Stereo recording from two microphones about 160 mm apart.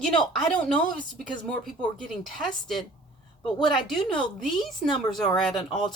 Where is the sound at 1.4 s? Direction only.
5° left (ahead or behind).